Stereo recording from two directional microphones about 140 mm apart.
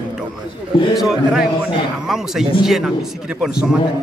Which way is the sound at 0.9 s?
5° right (ahead or behind).